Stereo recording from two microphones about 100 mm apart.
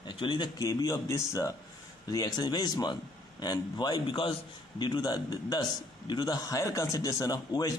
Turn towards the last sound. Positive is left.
turn(degrees=40)  # may be behind; listen again after turning